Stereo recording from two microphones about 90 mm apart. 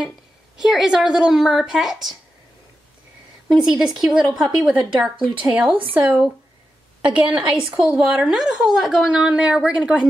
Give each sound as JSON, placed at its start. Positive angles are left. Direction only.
{"t": 0.6, "sound": "speech", "side_deg": -5}
{"t": 3.4, "sound": "a woman's voice", "side_deg": -5}